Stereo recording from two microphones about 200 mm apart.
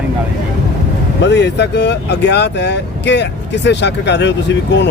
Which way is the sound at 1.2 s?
60° left (ahead or behind).